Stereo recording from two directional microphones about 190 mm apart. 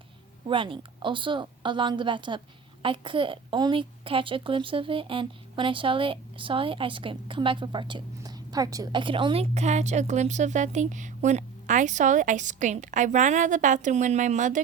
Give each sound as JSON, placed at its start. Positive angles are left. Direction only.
{"t": 0.4, "sound": "a child's voice", "side_deg": -25}